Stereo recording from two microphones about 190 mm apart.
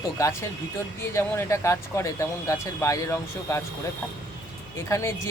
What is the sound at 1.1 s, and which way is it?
Speech, 15° left (ahead or behind).